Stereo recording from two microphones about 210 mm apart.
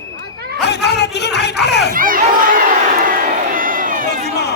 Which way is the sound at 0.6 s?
55° left (ahead or behind).